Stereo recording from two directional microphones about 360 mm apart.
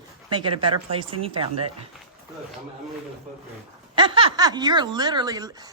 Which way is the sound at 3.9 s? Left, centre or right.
Centre.